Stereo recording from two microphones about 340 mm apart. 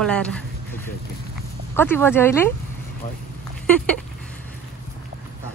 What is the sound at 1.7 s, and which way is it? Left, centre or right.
Speech, centre.